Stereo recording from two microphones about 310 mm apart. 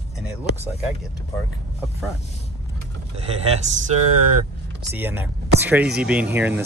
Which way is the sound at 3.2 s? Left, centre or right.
Centre.